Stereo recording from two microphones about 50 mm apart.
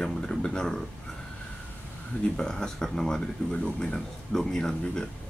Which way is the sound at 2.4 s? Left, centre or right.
Centre.